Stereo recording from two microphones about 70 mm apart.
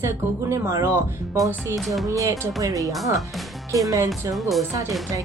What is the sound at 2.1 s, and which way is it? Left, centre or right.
Speech, right.